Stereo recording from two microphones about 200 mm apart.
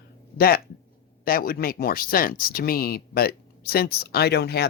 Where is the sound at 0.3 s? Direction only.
50° left (ahead or behind).